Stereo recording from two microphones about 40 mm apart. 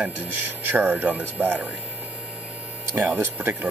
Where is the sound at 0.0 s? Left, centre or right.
Right.